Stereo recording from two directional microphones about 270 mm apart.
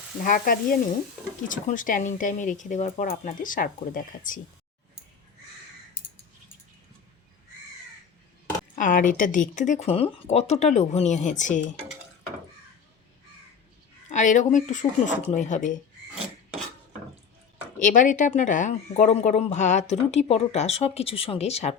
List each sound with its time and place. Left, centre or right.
0.2 s sizzle: left
1.5 s speech: left
8.8 s speech: left
14.1 s speech: left
17.7 s speech: left